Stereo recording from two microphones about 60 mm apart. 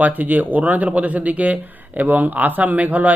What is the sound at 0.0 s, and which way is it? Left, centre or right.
Speech, right.